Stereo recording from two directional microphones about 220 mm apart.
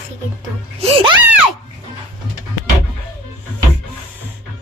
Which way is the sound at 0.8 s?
25° right (ahead or behind).